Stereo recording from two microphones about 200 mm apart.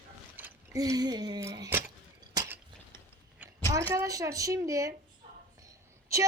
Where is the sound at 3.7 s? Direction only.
15° right (ahead or behind).